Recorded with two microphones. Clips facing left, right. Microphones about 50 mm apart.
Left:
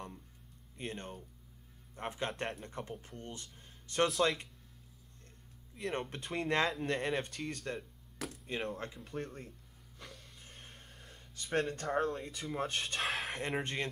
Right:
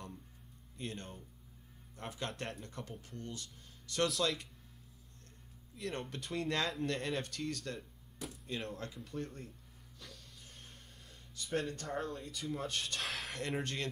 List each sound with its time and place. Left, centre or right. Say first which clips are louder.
0.7 s speech: left 2 dB; left
5.9 s speech: left 3 dB; left
8.2 s speech: left 3 dB; left
8.7 s speech: left 1 dB; left
9.9 s a sound: left 3 dB; left
11.0 s speech: right 1 dB; left
13.1 s a sound: left 5 dB; centre
13.4 s speech: left 2 dB; left